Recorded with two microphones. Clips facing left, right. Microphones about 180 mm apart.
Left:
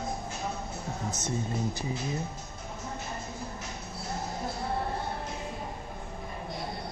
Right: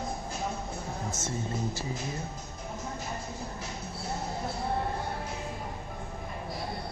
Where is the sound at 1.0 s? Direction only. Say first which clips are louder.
Left 3 dB; 20° left (ahead or behind).